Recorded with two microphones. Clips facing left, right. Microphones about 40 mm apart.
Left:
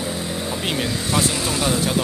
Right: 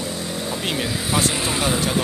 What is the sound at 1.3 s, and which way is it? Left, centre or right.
Speech, centre.